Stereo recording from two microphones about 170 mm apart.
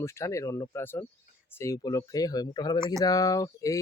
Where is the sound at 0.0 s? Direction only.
15° left (ahead or behind).